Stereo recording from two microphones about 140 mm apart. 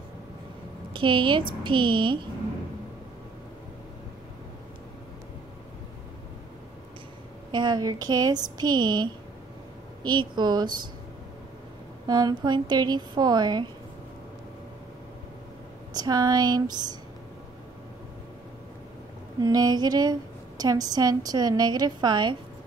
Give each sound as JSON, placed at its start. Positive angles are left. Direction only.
{"t": 0.9, "sound": "a woman's voice", "side_deg": -35}
{"t": 7.5, "sound": "a woman's voice", "side_deg": -30}
{"t": 12.1, "sound": "a woman's voice", "side_deg": -30}
{"t": 15.9, "sound": "a woman's voice", "side_deg": -30}
{"t": 19.4, "sound": "a woman's voice", "side_deg": -30}